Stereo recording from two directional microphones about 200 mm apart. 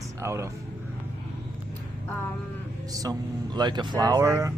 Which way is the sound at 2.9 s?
20° right (ahead or behind).